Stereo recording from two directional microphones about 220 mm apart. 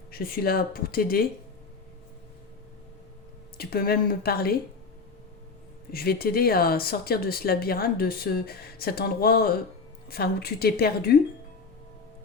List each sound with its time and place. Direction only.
0.1 s speech: 40° left (ahead or behind)
3.6 s speech: 45° left (ahead or behind)
5.9 s speech: 45° left (ahead or behind)